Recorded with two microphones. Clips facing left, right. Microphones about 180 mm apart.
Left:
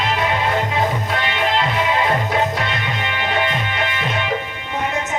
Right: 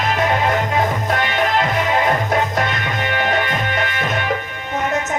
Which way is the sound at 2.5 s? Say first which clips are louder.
Right 3 dB; 45° right (ahead or behind).